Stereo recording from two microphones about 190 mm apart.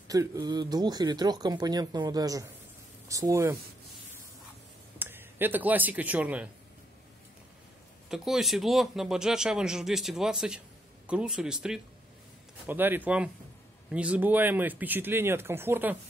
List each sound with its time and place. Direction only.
0.1 s speech: 20° right (ahead or behind)
4.9 s a man's voice: 10° right (ahead or behind)
8.1 s speech: centre (ahead or behind)